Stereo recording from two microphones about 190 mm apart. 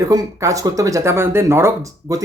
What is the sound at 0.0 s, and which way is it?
Speech, 20° right (ahead or behind).